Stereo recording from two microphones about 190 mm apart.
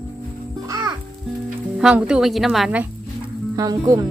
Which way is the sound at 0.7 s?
20° right (ahead or behind).